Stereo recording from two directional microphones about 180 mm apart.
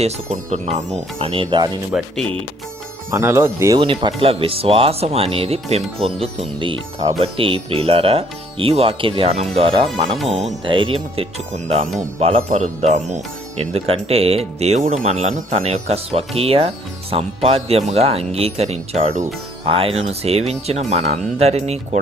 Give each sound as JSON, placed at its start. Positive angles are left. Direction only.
{"t": 0.0, "sound": "speech", "side_deg": -40}
{"t": 1.9, "sound": "speech", "side_deg": -5}
{"t": 3.8, "sound": "speech", "side_deg": -30}
{"t": 12.4, "sound": "speech", "side_deg": -45}